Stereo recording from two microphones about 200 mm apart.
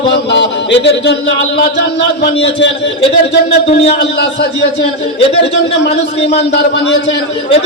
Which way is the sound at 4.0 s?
60° left (ahead or behind).